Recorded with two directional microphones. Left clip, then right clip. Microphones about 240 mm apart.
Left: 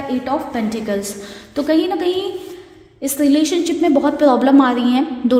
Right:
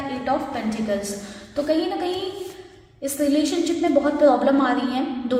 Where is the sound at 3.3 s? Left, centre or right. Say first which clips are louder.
Left 5 dB; left.